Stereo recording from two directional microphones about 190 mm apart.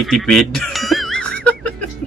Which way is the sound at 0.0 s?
Centre (ahead or behind).